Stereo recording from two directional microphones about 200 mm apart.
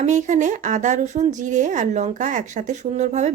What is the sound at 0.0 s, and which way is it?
Speech, 35° right (ahead or behind).